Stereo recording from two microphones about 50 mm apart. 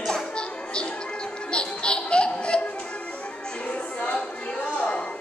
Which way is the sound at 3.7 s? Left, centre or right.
Left.